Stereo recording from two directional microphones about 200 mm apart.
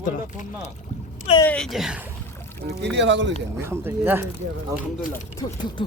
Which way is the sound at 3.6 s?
10° right (ahead or behind).